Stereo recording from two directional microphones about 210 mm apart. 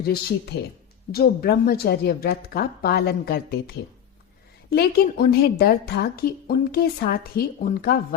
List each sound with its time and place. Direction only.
0.0 s a woman's voice: 50° left (ahead or behind)